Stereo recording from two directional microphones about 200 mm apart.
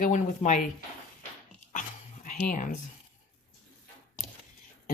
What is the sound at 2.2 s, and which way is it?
Speech, 40° left (ahead or behind).